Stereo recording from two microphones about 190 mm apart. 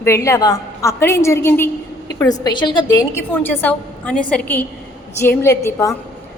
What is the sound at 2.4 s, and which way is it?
Speech, 25° left (ahead or behind).